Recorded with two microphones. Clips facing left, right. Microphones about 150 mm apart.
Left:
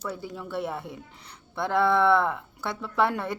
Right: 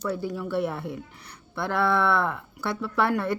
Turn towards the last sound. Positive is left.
turn(degrees=20)  # may be behind; listen again after turning